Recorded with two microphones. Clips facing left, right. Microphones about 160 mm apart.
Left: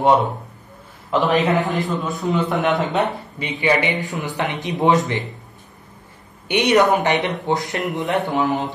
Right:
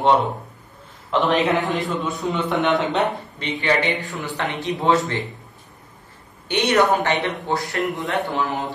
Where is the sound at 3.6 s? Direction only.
15° left (ahead or behind).